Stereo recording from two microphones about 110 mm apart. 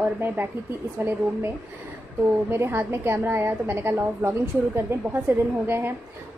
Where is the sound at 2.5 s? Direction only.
20° right (ahead or behind).